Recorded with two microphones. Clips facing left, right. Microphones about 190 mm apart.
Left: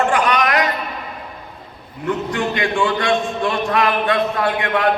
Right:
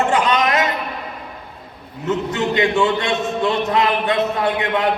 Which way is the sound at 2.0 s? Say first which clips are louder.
Right 1 dB; 25° right (ahead or behind).